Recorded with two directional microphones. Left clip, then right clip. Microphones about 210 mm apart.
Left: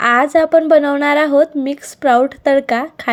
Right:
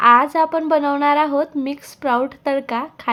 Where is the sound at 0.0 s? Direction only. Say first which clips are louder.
Left 1 dB; 15° left (ahead or behind).